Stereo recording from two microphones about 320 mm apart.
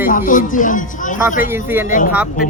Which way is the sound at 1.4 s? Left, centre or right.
Centre.